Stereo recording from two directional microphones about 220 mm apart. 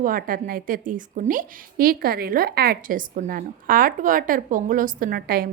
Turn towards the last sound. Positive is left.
turn(degrees=-40)  # may be behind; listen again after turning